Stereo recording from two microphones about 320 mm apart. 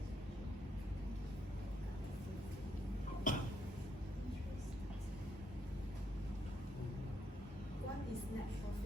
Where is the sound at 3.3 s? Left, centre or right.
Left.